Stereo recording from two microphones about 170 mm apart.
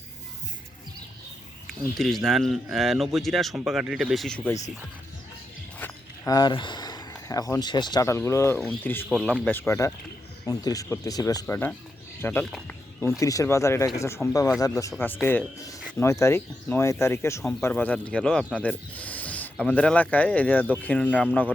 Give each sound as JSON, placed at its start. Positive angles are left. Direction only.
{"t": 1.6, "sound": "speech", "side_deg": 0}
{"t": 5.8, "sound": "speech", "side_deg": 20}
{"t": 9.0, "sound": "speech", "side_deg": -5}
{"t": 9.6, "sound": "speech", "side_deg": 15}
{"t": 11.4, "sound": "speech", "side_deg": 10}
{"t": 13.0, "sound": "speech", "side_deg": 15}